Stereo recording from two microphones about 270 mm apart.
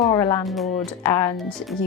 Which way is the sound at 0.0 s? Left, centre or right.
Centre.